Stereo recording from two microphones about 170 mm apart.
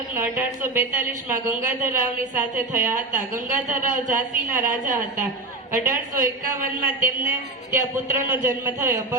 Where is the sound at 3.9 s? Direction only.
50° right (ahead or behind).